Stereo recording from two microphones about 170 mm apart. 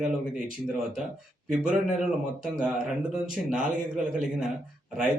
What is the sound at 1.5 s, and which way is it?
Speech, 5° right (ahead or behind).